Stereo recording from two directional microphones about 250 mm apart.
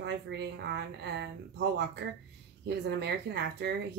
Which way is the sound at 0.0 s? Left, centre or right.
Right.